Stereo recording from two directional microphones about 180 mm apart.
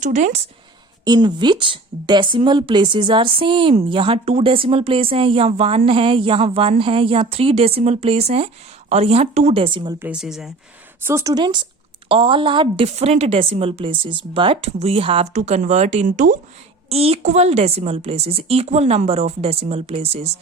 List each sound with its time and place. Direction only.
0.0 s speech: 40° right (ahead or behind)
1.0 s a woman's voice: 25° right (ahead or behind)
10.0 s speech: 5° right (ahead or behind)
11.0 s a woman's voice: 15° right (ahead or behind); by 16.4 s 45° right (ahead or behind)
16.9 s a woman's voice: 35° right (ahead or behind)